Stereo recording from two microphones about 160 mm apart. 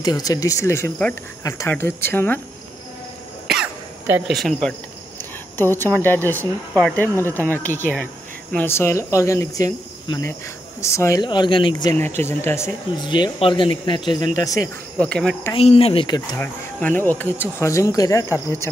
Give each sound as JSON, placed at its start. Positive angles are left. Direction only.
{"t": 0.0, "sound": "speech", "side_deg": 25}
{"t": 4.3, "sound": "speech", "side_deg": 0}
{"t": 5.6, "sound": "speech", "side_deg": 15}
{"t": 10.0, "sound": "cricket", "side_deg": 25}
{"t": 10.8, "sound": "speech", "side_deg": 20}
{"t": 11.2, "sound": "speech", "side_deg": 30}
{"t": 12.2, "sound": "speech", "side_deg": 15}
{"t": 13.0, "sound": "speech", "side_deg": 30}
{"t": 15.0, "sound": "speech", "side_deg": 5}
{"t": 15.5, "sound": "speech", "side_deg": 40}
{"t": 16.3, "sound": "speech", "side_deg": 10}